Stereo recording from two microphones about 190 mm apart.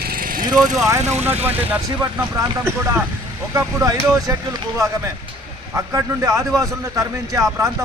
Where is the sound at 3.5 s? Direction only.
15° right (ahead or behind).